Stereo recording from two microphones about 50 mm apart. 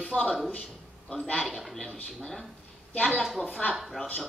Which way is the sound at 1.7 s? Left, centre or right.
Centre.